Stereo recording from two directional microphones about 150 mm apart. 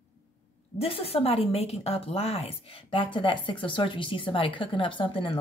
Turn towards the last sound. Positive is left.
turn(degrees=35)  # may be behind; listen again after turning